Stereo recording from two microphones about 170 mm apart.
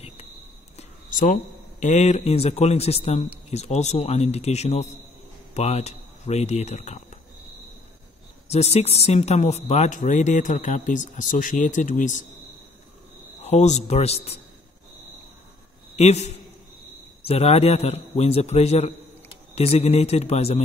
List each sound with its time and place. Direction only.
0.7 s speech: 50° left (ahead or behind)
8.5 s speech: 40° left (ahead or behind)
13.4 s a man's voice: 40° left (ahead or behind)
16.0 s a man's voice: 40° left (ahead or behind)